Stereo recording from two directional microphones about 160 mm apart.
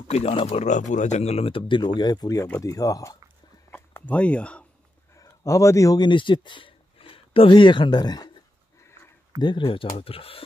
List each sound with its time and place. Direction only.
0.1 s speech: 35° left (ahead or behind); by 3.2 s 20° left (ahead or behind)
3.7 s a sound: 10° left (ahead or behind)
5.1 s speech: 20° left (ahead or behind)
9.4 s speech: 30° left (ahead or behind)